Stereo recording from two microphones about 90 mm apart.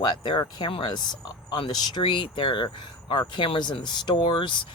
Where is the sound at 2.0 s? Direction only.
70° left (ahead or behind).